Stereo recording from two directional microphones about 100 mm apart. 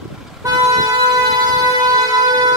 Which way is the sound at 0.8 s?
40° right (ahead or behind).